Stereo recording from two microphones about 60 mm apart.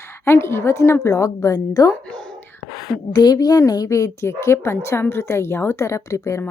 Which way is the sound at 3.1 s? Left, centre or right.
Left.